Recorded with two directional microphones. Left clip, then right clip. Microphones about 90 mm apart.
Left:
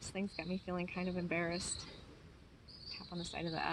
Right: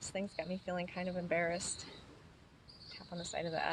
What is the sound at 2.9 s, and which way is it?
Cricket, 45° right (ahead or behind).